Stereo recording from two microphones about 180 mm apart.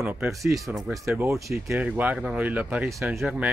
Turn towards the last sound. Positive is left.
turn(degrees=-5)  # may be behind; listen again after turning